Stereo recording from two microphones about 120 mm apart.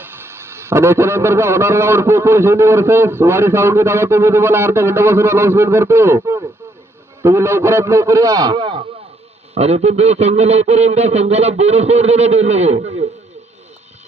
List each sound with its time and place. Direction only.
0.0 s speech: 20° right (ahead or behind); by 8.8 s 40° right (ahead or behind)
9.6 s speech: 60° right (ahead or behind)